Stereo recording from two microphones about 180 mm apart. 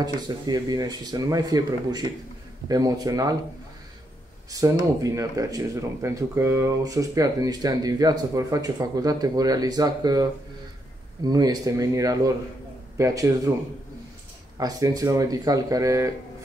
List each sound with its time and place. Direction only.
0.0 s speech: 20° right (ahead or behind)
4.5 s speech: 20° right (ahead or behind)
11.2 s speech: 20° right (ahead or behind)
14.6 s speech: 20° right (ahead or behind)